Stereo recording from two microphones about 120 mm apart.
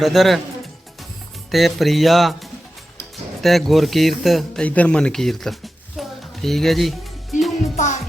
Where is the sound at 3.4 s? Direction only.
Centre (ahead or behind).